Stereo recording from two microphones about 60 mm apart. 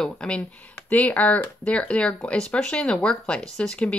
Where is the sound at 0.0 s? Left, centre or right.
Centre.